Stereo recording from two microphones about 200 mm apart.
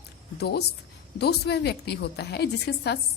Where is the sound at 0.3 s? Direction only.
55° left (ahead or behind).